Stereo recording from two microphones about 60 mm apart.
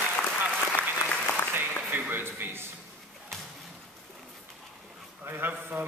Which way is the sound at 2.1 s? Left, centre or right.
Right.